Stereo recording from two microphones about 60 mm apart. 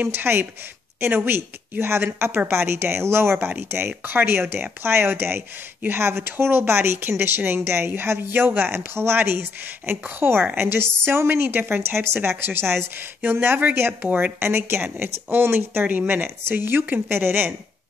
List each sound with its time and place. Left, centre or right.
0.0 s a woman's voice: right